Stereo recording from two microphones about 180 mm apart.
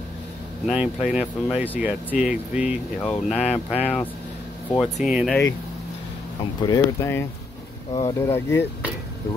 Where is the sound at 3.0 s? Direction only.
10° left (ahead or behind).